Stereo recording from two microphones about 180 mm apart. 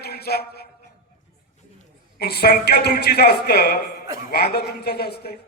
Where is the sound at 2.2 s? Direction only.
60° left (ahead or behind).